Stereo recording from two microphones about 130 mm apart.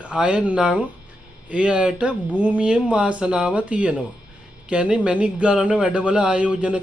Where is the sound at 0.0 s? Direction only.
10° right (ahead or behind).